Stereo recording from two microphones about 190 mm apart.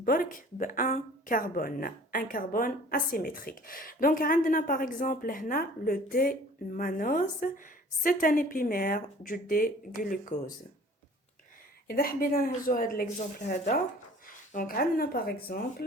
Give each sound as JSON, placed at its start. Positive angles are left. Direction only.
{"t": 0.0, "sound": "a woman's voice", "side_deg": 50}
{"t": 11.9, "sound": "a woman's voice", "side_deg": 50}